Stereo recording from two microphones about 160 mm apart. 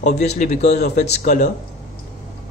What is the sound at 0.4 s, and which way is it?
Speech, 45° left (ahead or behind).